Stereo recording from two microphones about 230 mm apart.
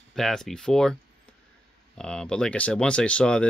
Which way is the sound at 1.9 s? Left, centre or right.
Centre.